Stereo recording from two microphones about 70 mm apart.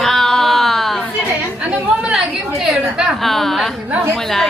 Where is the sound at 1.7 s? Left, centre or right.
Centre.